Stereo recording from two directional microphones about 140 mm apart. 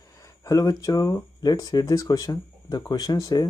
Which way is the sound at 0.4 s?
25° left (ahead or behind).